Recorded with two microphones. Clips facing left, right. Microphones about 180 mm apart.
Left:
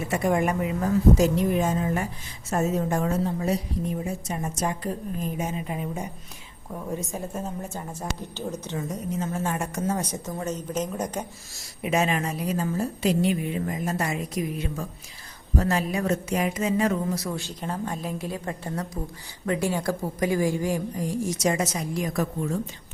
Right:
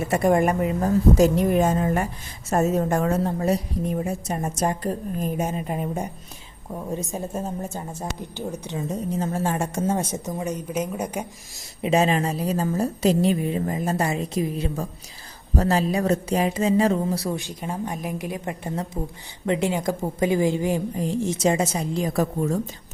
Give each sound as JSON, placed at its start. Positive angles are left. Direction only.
{"t": 0.1, "sound": "a woman's voice", "side_deg": -45}
{"t": 6.9, "sound": "a woman's voice", "side_deg": -25}
{"t": 8.2, "sound": "a woman's voice", "side_deg": -15}
{"t": 8.9, "sound": "a woman's voice", "side_deg": -35}
{"t": 11.8, "sound": "a woman's voice", "side_deg": -30}
{"t": 17.3, "sound": "a woman's voice", "side_deg": -15}